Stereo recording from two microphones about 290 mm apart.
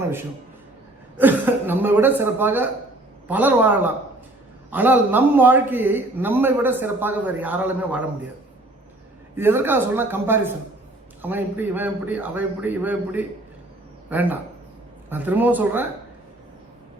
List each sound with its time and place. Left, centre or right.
1.2 s a man's voice: centre
9.3 s a man's voice: centre